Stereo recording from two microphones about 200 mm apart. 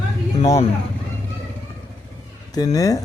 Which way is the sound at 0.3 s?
35° left (ahead or behind).